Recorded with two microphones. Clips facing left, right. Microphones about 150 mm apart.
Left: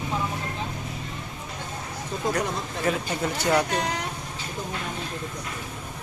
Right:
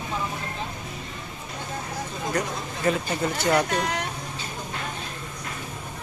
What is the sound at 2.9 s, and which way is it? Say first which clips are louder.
Speech: right 2 dB; 5° left (ahead or behind).